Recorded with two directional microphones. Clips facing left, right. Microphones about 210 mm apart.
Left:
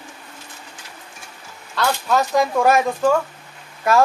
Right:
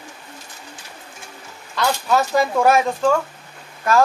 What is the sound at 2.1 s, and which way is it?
Speech, centre (ahead or behind).